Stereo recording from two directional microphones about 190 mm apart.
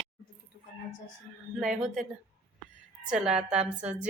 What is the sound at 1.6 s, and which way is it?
Speech, centre (ahead or behind).